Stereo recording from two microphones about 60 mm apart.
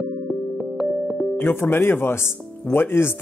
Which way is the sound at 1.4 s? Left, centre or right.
Left.